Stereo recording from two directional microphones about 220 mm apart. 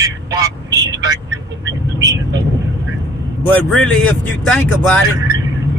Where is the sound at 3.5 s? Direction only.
5° left (ahead or behind).